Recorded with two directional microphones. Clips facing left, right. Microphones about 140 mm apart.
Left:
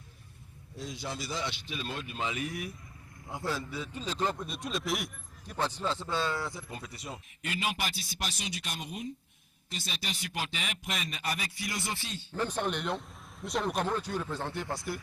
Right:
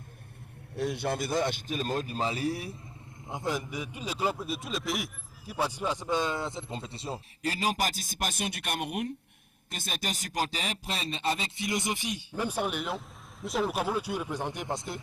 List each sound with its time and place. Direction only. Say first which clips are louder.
0.8 s speech: right 8 dB; 60° right (ahead or behind); by 2.7 s 30° right (ahead or behind)
3.2 s a man's voice: right 2 dB; 20° right (ahead or behind); by 9.1 s 65° right (ahead or behind)
9.6 s a man's voice: right 4 dB; 50° right (ahead or behind); by 15.0 s 20° right (ahead or behind)